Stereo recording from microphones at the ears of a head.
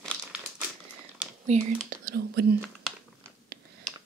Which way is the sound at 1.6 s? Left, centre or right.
Right.